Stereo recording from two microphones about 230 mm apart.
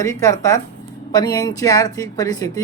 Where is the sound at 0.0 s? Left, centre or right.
Centre.